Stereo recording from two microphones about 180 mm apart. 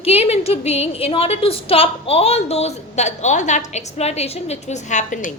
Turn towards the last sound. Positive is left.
turn(degrees=45)  # may be behind; listen again after turning